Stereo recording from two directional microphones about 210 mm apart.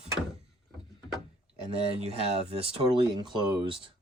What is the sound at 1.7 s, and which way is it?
Speech, 30° right (ahead or behind).